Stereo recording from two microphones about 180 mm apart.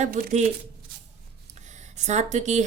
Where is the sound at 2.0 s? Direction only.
40° right (ahead or behind).